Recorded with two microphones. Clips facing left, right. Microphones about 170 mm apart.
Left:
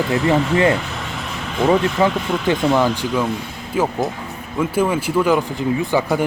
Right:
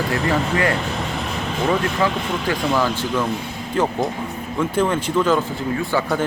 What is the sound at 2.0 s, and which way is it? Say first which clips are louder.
A man's voice: left 3 dB; 25° left (ahead or behind).